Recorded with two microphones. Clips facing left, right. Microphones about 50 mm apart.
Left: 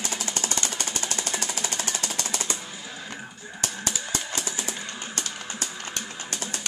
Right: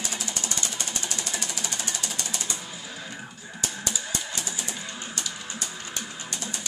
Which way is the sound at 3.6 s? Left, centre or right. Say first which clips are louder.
Left 1 dB; left.